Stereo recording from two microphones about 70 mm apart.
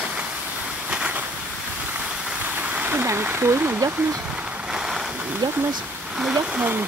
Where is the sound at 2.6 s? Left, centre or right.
Right.